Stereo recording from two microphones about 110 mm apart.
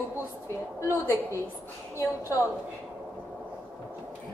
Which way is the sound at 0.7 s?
25° left (ahead or behind).